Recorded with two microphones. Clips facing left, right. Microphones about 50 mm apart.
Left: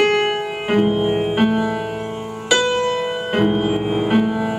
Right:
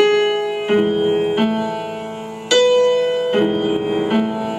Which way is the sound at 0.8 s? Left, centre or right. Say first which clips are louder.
Right 2 dB; centre.